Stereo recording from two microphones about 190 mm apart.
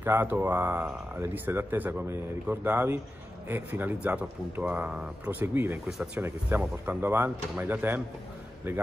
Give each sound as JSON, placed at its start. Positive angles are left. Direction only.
{"t": 0.0, "sound": "speech", "side_deg": -10}